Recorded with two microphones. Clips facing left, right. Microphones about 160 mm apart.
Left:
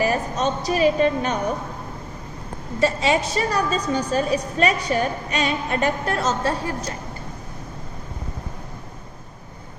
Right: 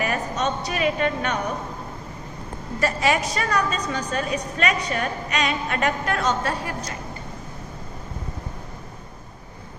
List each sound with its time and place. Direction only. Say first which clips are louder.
0.0 s a woman's voice: left 3 dB; 30° left (ahead or behind)
2.8 s a woman's voice: left 2 dB; 25° left (ahead or behind)